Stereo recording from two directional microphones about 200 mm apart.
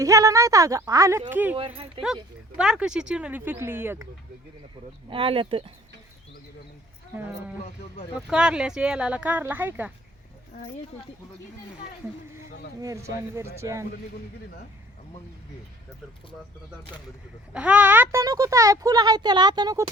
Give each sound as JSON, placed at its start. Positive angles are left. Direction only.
{"t": 0.0, "sound": "speech", "side_deg": -15}
{"t": 2.6, "sound": "speech", "side_deg": -5}
{"t": 5.1, "sound": "speech", "side_deg": -25}
{"t": 8.1, "sound": "speech", "side_deg": -5}
{"t": 12.8, "sound": "speech", "side_deg": -15}
{"t": 17.5, "sound": "speech", "side_deg": -5}